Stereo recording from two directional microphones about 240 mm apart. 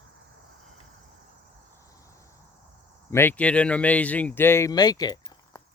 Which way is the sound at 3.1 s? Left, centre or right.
Centre.